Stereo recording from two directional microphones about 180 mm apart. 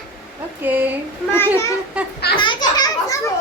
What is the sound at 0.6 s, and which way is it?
Speech, 10° right (ahead or behind).